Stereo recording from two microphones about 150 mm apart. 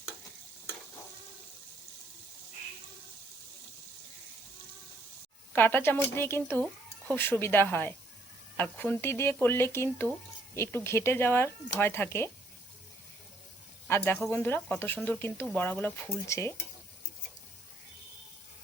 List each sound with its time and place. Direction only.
5.5 s speech: 15° left (ahead or behind)
13.8 s speech: 15° left (ahead or behind)